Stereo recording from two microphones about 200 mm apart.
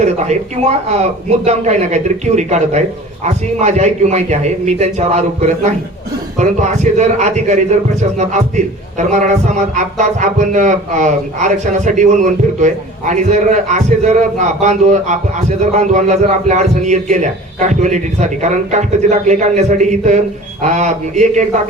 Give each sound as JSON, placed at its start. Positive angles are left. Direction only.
{"t": 0.0, "sound": "a man's voice", "side_deg": -35}